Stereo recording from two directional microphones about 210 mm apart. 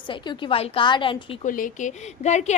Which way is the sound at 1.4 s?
40° left (ahead or behind).